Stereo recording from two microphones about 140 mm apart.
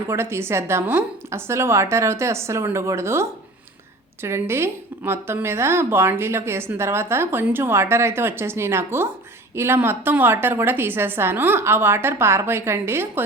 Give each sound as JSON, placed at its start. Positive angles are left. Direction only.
{"t": 0.1, "sound": "a woman's voice", "side_deg": -20}